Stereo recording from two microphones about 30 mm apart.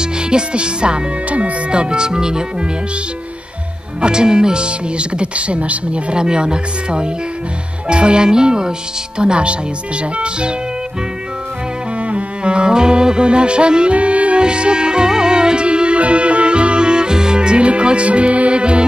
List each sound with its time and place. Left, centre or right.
0.0 s speech: right
4.0 s speech: right
6.1 s speech: right
9.2 s speech: right
12.0 s music: right
13.9 s music: right
14.4 s music: right
18.5 s speech: right